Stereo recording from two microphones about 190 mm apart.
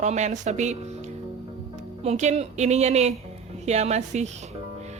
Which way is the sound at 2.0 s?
35° right (ahead or behind).